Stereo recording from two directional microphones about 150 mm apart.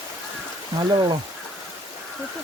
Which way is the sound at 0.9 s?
30° right (ahead or behind).